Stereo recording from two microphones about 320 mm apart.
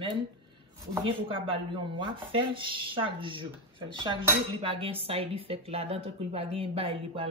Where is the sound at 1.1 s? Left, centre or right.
Centre.